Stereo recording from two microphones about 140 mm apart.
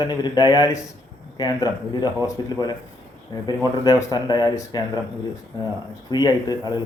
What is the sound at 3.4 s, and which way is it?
A man's voice, 30° left (ahead or behind).